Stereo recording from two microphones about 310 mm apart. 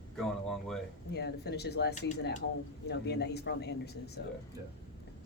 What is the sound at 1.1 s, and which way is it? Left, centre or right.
Speech, left.